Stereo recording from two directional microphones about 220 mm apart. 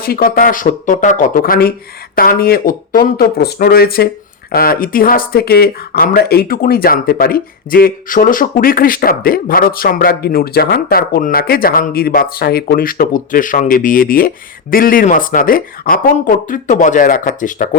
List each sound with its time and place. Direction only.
0.0 s speech: 45° left (ahead or behind)